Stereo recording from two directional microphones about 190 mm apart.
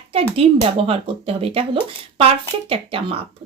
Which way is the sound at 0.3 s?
30° right (ahead or behind).